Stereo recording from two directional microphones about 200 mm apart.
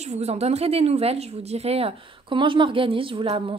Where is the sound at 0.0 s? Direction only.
35° right (ahead or behind).